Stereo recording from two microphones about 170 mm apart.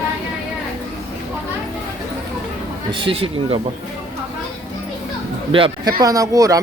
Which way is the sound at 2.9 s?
30° right (ahead or behind).